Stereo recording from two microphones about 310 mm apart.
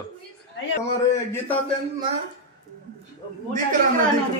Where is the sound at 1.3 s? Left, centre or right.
Centre.